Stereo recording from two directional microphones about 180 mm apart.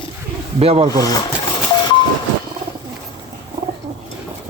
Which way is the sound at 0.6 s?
35° right (ahead or behind).